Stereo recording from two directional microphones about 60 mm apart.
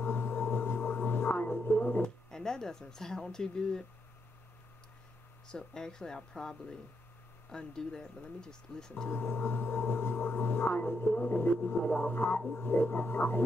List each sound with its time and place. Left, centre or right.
0.0 s a sound: left
2.3 s speech: centre
5.5 s speech: centre
9.1 s speech: left
12.4 s speech: left